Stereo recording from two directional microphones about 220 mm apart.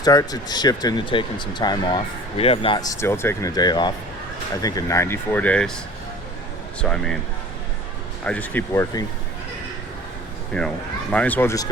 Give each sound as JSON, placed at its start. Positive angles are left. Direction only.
{"t": 0.0, "sound": "speech", "side_deg": 15}
{"t": 6.8, "sound": "speech", "side_deg": 5}
{"t": 8.2, "sound": "speech", "side_deg": 5}
{"t": 10.5, "sound": "speech", "side_deg": 5}